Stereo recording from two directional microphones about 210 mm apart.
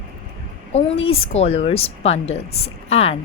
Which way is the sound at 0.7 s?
30° left (ahead or behind).